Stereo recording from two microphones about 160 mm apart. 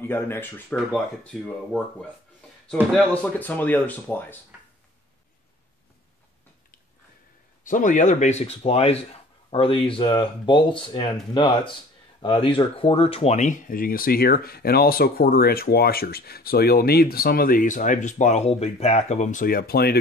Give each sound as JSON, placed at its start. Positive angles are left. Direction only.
{"t": 0.0, "sound": "speech", "side_deg": 15}
{"t": 3.3, "sound": "speech", "side_deg": 10}
{"t": 7.6, "sound": "speech", "side_deg": 55}